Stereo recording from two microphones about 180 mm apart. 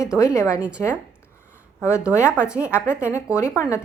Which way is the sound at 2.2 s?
10° right (ahead or behind).